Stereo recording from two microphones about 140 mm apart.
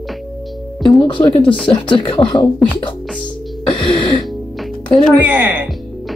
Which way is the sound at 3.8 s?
35° left (ahead or behind).